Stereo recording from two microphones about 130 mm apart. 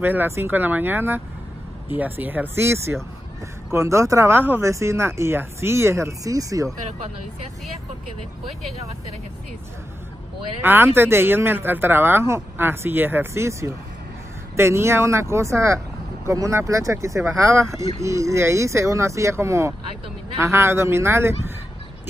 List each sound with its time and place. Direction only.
0.0 s a man's voice: 15° right (ahead or behind)
10.6 s a man's voice: 15° right (ahead or behind)